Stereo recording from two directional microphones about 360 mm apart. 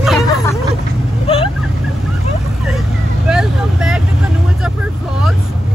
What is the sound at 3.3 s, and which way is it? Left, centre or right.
Vehicle, centre.